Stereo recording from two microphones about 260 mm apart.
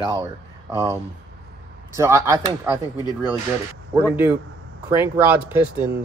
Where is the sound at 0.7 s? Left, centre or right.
Centre.